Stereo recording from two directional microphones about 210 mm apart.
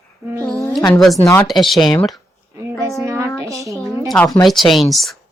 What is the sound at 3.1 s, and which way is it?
Speech, 15° right (ahead or behind).